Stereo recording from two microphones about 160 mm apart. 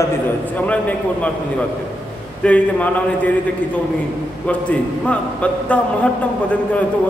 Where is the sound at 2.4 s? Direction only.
10° left (ahead or behind).